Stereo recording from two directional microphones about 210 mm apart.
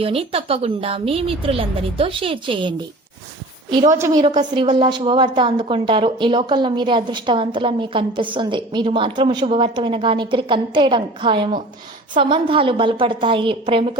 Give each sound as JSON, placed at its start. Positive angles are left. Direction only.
{"t": 0.0, "sound": "a woman's voice", "side_deg": -25}